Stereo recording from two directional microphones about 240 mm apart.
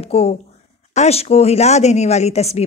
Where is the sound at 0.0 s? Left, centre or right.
Left.